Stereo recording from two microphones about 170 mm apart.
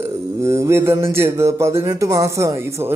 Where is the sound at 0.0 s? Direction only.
15° right (ahead or behind).